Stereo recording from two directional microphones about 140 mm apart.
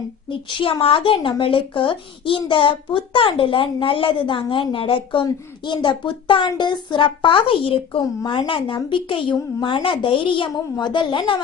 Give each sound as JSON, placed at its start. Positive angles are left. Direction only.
{"t": 0.3, "sound": "a woman's voice", "side_deg": 40}